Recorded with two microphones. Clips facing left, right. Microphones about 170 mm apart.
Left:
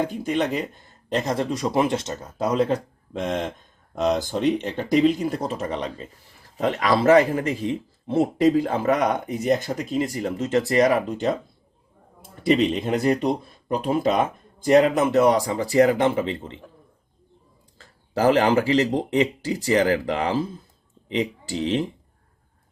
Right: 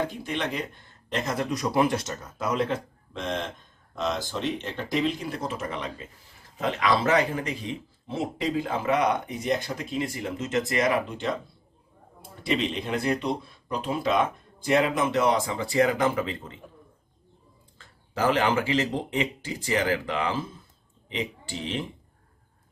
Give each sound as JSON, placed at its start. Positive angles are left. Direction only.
{"t": 0.1, "sound": "speech", "side_deg": 45}
{"t": 1.1, "sound": "speech", "side_deg": 30}
{"t": 5.4, "sound": "speech", "side_deg": 35}
{"t": 8.0, "sound": "speech", "side_deg": 50}
{"t": 12.5, "sound": "speech", "side_deg": 45}
{"t": 17.7, "sound": "speech", "side_deg": 40}